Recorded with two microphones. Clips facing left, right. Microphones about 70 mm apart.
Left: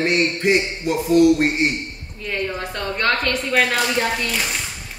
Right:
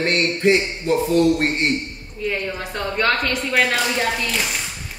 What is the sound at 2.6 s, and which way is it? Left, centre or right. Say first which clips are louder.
Speech: right 1 dB; centre.